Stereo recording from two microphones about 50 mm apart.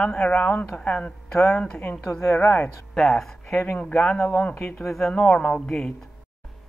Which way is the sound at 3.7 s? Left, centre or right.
Left.